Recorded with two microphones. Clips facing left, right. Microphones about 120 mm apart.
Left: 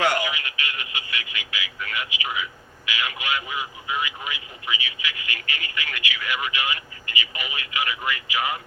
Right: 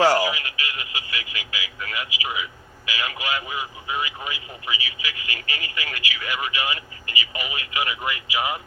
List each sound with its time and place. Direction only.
0.0 s radio: 35° right (ahead or behind)
3.0 s speech: 35° right (ahead or behind)